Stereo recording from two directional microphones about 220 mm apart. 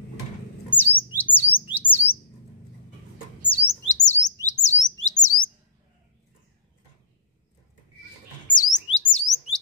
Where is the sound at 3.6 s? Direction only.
35° left (ahead or behind).